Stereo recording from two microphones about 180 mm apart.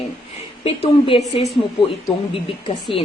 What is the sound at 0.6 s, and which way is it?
Speech, 30° left (ahead or behind).